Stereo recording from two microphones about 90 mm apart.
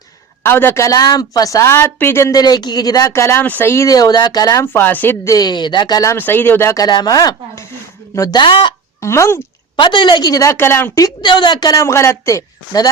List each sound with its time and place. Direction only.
0.4 s a woman's voice: 25° left (ahead or behind)
2.3 s speech: 45° left (ahead or behind)
3.1 s speech: 30° left (ahead or behind)
3.8 s speech: 45° left (ahead or behind)
4.6 s speech: 25° left (ahead or behind)
5.2 s speech: 45° left (ahead or behind)
6.1 s speech: 20° left (ahead or behind)
6.9 s a woman's voice: 50° left (ahead or behind)
8.4 s speech: 70° left (ahead or behind)
9.0 s a woman's voice: 30° left (ahead or behind)
9.7 s a woman's voice: 60° left (ahead or behind); by 11.0 s 25° left (ahead or behind)
11.2 s a woman's voice: 60° left (ahead or behind)
11.7 s a woman's voice: 35° left (ahead or behind)